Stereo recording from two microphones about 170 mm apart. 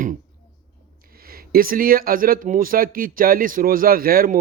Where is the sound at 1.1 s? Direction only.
60° right (ahead or behind).